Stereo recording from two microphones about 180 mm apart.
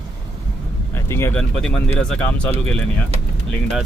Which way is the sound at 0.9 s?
15° left (ahead or behind).